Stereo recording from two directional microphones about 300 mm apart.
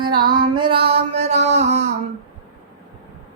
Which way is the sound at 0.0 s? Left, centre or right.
Centre.